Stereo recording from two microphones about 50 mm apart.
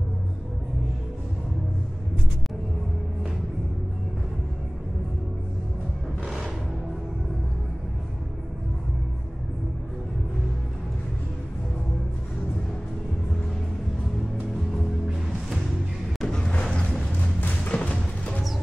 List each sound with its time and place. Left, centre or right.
6.2 s music: centre
15.0 s music: centre
16.2 s a sound: centre
16.6 s music: centre
17.4 s music: left